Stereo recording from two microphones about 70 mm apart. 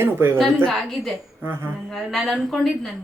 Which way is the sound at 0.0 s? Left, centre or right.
Right.